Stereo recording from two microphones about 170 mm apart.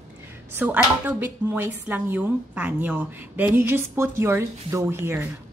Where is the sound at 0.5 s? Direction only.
10° right (ahead or behind).